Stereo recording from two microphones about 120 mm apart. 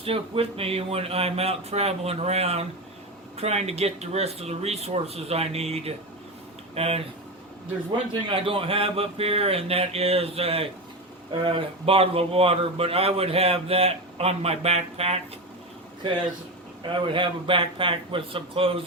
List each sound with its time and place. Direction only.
0.0 s speech: 50° right (ahead or behind)
8.3 s speech: 50° right (ahead or behind)
17.1 s speech: 45° right (ahead or behind)